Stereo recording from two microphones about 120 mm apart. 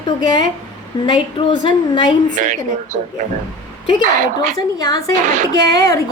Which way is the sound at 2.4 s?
90° right.